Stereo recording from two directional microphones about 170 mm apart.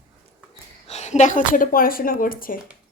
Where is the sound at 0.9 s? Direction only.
40° left (ahead or behind).